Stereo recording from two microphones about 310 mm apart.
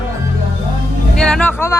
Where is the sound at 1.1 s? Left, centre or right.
Centre.